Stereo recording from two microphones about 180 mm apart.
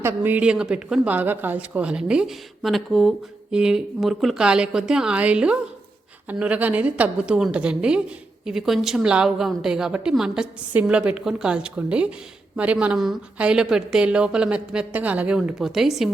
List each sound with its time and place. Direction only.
0.0 s a woman's voice: 10° right (ahead or behind)